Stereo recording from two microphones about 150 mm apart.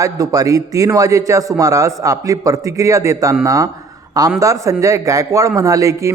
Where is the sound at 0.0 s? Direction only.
25° right (ahead or behind).